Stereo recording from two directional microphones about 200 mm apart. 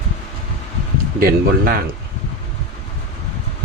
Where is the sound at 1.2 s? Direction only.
45° right (ahead or behind).